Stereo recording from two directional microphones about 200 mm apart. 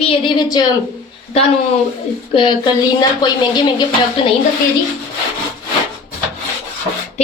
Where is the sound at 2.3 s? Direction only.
25° left (ahead or behind).